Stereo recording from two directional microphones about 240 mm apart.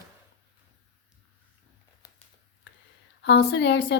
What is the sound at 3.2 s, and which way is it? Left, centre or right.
Speech, left.